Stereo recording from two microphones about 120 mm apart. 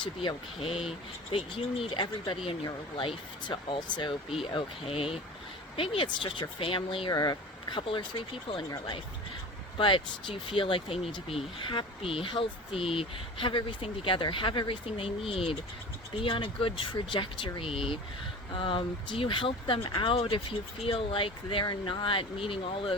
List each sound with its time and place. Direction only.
0.0 s speech: 45° left (ahead or behind)
4.4 s speech: 50° left (ahead or behind)
7.1 s speech: 35° left (ahead or behind)
7.8 s speech: 45° left (ahead or behind)
9.7 s speech: 45° left (ahead or behind)